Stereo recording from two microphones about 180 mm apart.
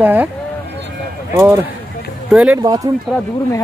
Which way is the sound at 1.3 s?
15° right (ahead or behind).